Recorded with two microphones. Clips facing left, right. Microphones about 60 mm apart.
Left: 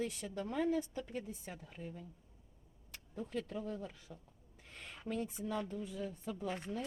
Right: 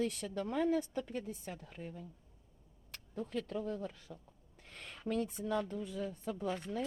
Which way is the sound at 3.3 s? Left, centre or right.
Right.